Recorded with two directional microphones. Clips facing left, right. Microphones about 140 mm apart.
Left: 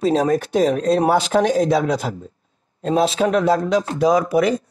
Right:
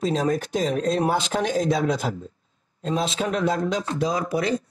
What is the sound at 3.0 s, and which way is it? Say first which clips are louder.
Speech: left 7 dB; 35° left (ahead or behind).